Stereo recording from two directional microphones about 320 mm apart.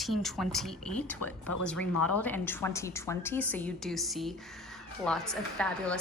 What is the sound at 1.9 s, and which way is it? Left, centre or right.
Speech, left.